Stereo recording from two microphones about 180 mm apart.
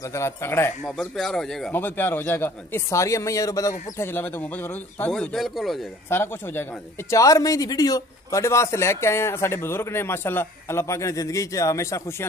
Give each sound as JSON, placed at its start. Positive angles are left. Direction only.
{"t": 0.1, "sound": "speech", "side_deg": 15}
{"t": 0.8, "sound": "speech", "side_deg": 0}
{"t": 5.1, "sound": "speech", "side_deg": 0}
{"t": 6.0, "sound": "speech", "side_deg": 10}